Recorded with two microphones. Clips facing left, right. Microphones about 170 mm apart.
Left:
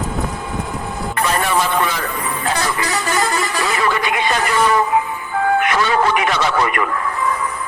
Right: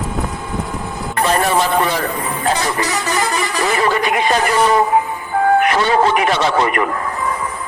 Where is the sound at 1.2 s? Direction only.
35° right (ahead or behind).